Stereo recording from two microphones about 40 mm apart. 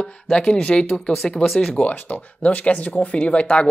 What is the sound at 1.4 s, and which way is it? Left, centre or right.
Speech, left.